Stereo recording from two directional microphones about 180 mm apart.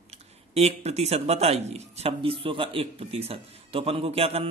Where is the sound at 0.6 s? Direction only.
35° right (ahead or behind).